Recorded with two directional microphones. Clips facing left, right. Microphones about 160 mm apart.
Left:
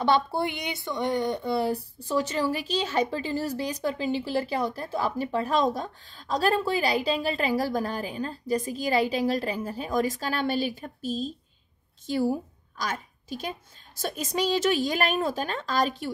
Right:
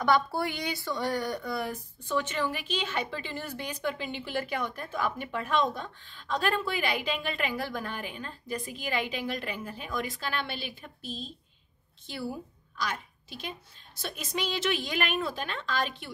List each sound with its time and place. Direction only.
0.0 s a woman's voice: 25° left (ahead or behind)